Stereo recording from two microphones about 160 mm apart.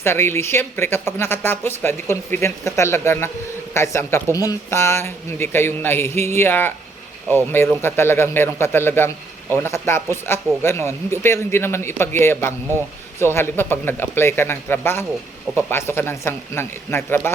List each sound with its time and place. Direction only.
0.0 s speech: 15° left (ahead or behind)